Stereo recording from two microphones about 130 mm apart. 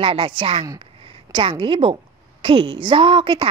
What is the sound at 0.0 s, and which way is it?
A woman's voice, 40° right (ahead or behind).